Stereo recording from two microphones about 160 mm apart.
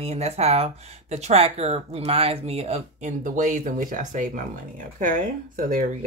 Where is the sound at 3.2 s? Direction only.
55° right (ahead or behind).